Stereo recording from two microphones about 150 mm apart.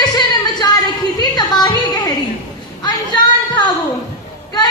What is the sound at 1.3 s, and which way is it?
Music, 30° left (ahead or behind).